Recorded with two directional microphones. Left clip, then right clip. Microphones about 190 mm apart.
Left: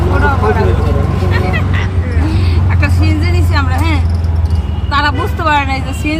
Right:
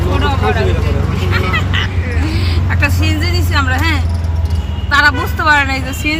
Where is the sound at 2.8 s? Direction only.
5° right (ahead or behind).